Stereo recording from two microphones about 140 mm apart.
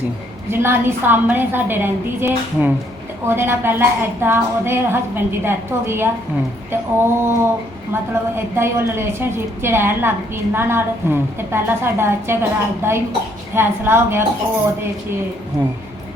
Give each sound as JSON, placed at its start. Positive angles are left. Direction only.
{"t": 0.5, "sound": "a woman's voice", "side_deg": -15}
{"t": 8.5, "sound": "a woman's voice", "side_deg": -15}